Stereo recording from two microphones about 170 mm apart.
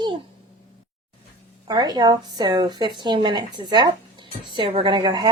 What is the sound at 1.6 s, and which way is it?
Speech, 25° right (ahead or behind).